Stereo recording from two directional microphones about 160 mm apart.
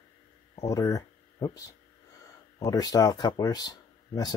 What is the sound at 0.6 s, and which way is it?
Speech, 20° left (ahead or behind).